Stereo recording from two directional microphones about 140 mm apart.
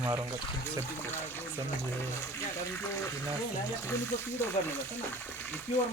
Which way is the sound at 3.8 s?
15° left (ahead or behind).